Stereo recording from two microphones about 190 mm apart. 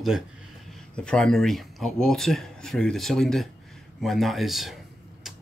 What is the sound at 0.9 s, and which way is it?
Speech, 5° left (ahead or behind).